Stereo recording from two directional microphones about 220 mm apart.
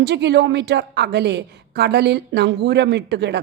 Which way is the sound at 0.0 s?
50° right (ahead or behind).